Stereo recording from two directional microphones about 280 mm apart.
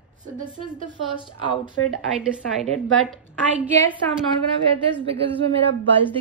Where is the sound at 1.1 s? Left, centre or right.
Centre.